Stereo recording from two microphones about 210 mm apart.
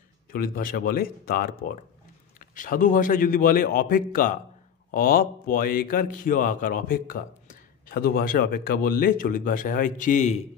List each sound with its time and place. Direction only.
0.3 s a man's voice: 40° left (ahead or behind)